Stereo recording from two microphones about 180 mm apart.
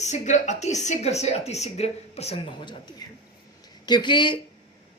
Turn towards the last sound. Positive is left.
turn(degrees=25)  # may be behind; listen again after turning